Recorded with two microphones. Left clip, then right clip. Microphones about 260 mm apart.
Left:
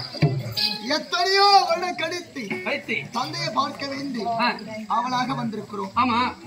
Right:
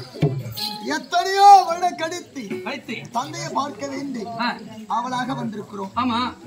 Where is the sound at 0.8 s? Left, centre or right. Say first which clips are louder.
Right 4 dB; centre.